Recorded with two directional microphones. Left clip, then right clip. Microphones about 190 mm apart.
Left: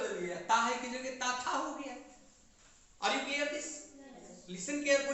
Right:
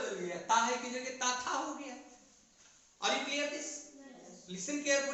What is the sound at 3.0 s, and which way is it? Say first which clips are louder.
Speech: even; 25° left (ahead or behind).